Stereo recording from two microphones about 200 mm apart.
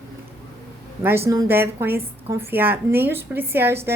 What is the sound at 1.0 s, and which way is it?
A woman's voice, 10° right (ahead or behind).